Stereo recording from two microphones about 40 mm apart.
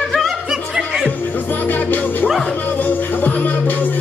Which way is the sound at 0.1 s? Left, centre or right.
Centre.